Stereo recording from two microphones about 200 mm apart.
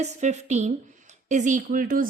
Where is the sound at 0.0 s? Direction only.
35° right (ahead or behind).